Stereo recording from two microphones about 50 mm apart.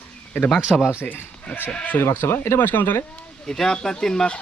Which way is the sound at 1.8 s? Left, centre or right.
Left.